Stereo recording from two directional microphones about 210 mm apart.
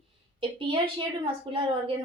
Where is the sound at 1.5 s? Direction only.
25° right (ahead or behind).